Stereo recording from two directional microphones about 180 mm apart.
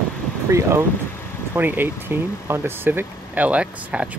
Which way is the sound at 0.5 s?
15° right (ahead or behind).